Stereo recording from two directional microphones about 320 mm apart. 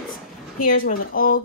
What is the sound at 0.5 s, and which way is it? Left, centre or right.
Speech, left.